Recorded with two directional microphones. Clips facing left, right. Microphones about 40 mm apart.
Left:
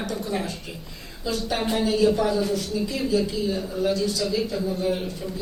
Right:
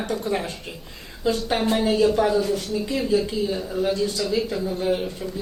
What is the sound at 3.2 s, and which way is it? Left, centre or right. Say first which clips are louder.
Speech: right 1 dB; centre.